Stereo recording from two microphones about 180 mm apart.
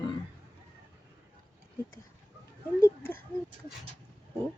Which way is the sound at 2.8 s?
10° left (ahead or behind).